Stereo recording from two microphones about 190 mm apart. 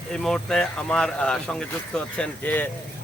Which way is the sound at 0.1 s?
Centre (ahead or behind).